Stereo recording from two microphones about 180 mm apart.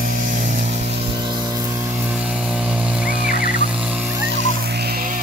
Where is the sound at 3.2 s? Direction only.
55° left (ahead or behind).